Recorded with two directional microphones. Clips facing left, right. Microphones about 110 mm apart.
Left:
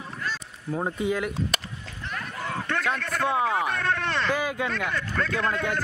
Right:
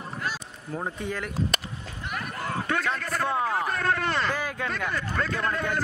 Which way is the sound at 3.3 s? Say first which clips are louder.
Left 2 dB; centre (ahead or behind).